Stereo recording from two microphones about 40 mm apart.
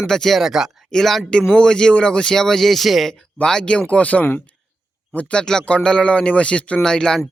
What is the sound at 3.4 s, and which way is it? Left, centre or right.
Speech, left.